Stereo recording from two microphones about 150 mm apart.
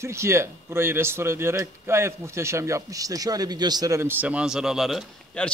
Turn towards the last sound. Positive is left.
turn(degrees=5)  # may be behind; listen again after turning